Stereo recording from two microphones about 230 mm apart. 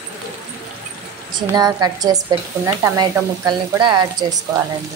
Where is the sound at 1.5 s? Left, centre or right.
Centre.